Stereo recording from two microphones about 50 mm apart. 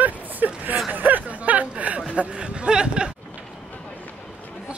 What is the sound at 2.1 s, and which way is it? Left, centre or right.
Speech, right.